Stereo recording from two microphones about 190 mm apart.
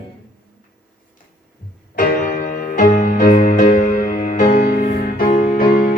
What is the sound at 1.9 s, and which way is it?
Music, 45° left (ahead or behind).